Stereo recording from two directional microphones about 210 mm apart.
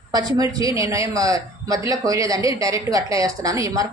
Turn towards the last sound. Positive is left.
turn(degrees=-15)  # may be behind; listen again after turning